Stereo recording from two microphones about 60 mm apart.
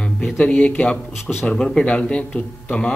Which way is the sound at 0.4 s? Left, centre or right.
Centre.